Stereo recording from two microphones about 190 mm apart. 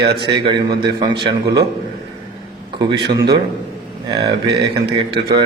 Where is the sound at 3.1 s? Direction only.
25° right (ahead or behind).